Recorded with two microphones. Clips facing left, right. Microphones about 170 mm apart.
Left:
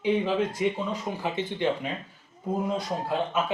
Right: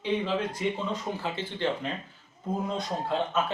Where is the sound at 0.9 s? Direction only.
15° left (ahead or behind).